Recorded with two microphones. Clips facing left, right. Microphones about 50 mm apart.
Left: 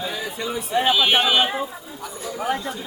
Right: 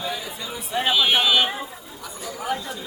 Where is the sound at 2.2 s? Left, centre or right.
Left.